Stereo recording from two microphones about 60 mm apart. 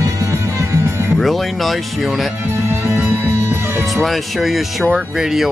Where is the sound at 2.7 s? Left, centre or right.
Right.